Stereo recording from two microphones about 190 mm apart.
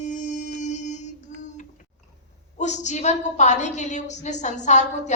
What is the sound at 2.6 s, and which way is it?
A woman's voice, 40° left (ahead or behind).